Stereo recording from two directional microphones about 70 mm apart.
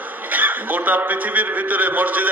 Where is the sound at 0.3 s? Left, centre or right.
Right.